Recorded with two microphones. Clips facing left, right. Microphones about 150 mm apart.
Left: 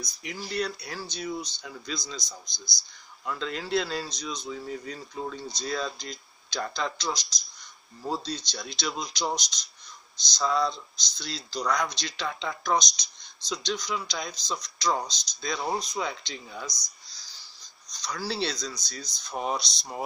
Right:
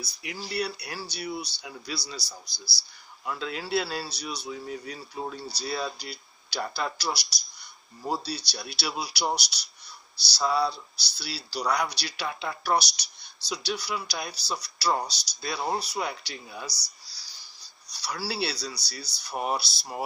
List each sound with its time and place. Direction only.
0.0 s speech: 10° right (ahead or behind)